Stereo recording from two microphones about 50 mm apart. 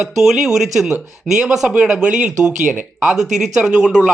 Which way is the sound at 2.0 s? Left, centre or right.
Right.